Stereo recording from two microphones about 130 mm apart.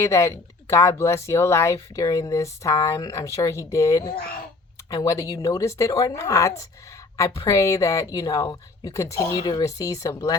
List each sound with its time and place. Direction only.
0.0 s speech: 20° left (ahead or behind)